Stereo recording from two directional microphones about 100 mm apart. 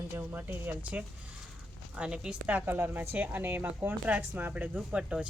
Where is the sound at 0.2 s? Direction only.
20° right (ahead or behind).